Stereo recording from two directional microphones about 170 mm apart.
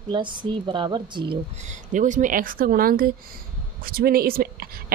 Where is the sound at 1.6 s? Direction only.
45° right (ahead or behind).